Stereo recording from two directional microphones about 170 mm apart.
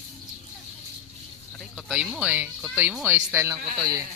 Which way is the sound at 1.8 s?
5° right (ahead or behind).